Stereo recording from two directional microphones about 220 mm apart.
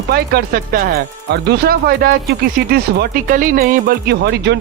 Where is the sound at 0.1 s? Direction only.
45° right (ahead or behind).